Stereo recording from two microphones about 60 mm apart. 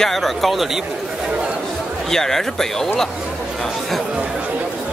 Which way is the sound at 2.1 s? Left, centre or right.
Centre.